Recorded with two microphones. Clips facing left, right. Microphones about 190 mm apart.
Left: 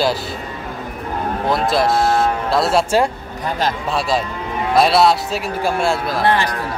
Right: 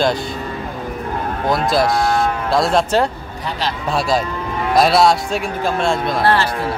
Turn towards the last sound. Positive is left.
turn(degrees=15)  # may be behind; listen again after turning